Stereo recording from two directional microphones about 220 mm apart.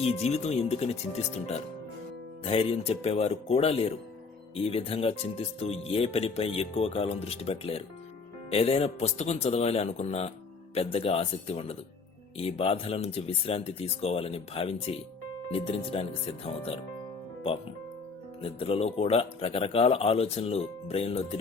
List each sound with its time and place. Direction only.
0.0 s speech: 30° left (ahead or behind)
18.4 s speech: 25° left (ahead or behind)